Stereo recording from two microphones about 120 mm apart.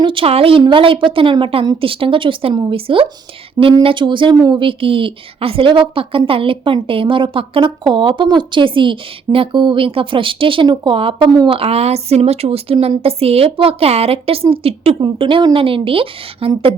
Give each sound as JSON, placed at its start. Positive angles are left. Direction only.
{"t": 0.0, "sound": "a woman's voice", "side_deg": -45}